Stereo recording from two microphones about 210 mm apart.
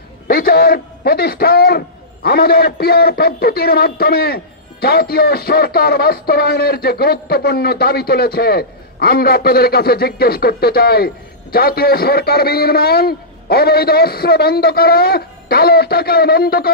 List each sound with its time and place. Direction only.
0.3 s a man's voice: 45° left (ahead or behind)